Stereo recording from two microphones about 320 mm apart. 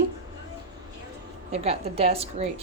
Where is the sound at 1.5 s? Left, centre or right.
Centre.